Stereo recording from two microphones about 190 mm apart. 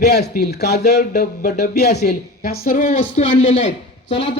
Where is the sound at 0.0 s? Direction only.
60° left (ahead or behind).